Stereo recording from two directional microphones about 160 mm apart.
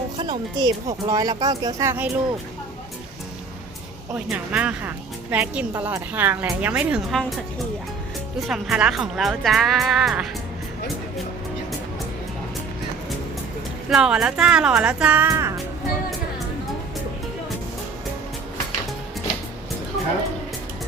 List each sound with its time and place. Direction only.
0.2 s speech: 25° right (ahead or behind)
4.1 s a woman's voice: 10° right (ahead or behind)
8.4 s speech: centre (ahead or behind)
13.9 s speech: 5° right (ahead or behind)